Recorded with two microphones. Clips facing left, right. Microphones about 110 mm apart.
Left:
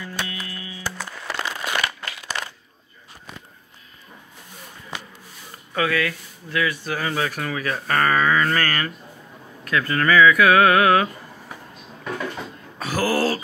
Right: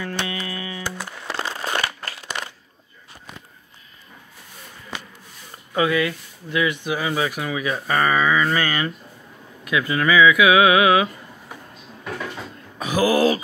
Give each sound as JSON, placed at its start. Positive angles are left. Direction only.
{"t": 0.0, "sound": "music", "side_deg": -75}
{"t": 0.8, "sound": "a sound", "side_deg": -15}
{"t": 1.2, "sound": "crumpling", "side_deg": -30}
{"t": 5.8, "sound": "speech", "side_deg": -20}
{"t": 12.7, "sound": "speech", "side_deg": -15}